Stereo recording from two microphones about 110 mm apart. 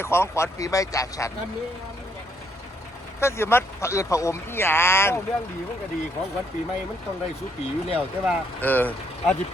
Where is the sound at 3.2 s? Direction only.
25° left (ahead or behind).